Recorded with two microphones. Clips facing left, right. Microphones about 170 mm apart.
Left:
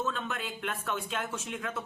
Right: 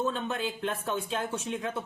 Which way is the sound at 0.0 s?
30° right (ahead or behind).